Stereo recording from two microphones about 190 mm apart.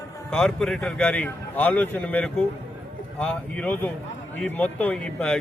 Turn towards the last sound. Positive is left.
turn(degrees=5)  # may be behind; listen again after turning